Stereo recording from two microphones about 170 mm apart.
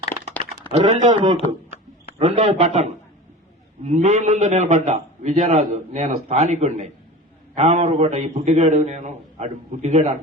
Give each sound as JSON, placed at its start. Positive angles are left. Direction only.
{"t": 0.9, "sound": "a man's voice", "side_deg": -45}
{"t": 2.1, "sound": "a man's voice", "side_deg": -30}
{"t": 2.6, "sound": "a man's voice", "side_deg": -45}